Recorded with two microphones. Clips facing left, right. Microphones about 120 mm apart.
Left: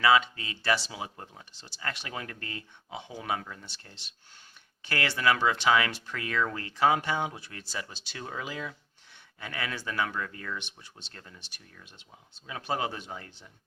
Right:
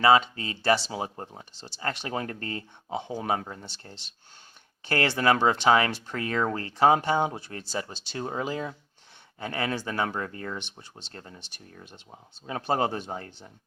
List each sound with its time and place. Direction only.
0.0 s speech: 35° right (ahead or behind)